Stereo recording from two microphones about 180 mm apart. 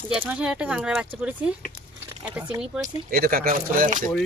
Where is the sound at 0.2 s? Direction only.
5° right (ahead or behind).